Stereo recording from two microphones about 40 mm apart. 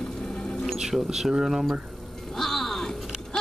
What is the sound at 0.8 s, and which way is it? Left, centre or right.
Speech, centre.